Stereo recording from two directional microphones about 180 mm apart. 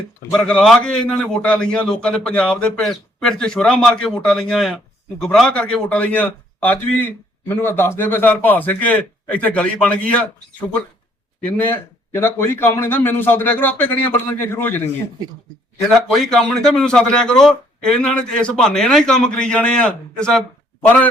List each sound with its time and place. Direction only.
0.3 s a man's voice: 5° left (ahead or behind)
15.9 s a man's voice: centre (ahead or behind)